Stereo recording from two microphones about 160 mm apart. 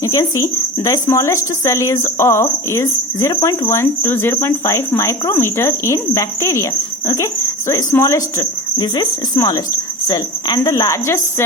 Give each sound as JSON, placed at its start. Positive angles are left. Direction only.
{"t": 0.0, "sound": "speech", "side_deg": 20}
{"t": 7.7, "sound": "speech", "side_deg": 20}